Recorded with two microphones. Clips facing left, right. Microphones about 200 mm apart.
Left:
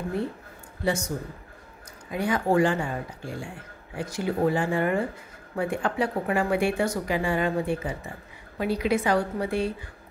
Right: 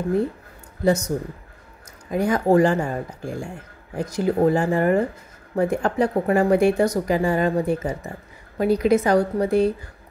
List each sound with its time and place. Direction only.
0.8 s speech: 40° right (ahead or behind)